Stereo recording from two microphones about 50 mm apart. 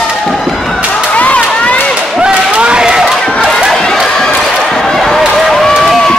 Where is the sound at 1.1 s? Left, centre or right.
Left.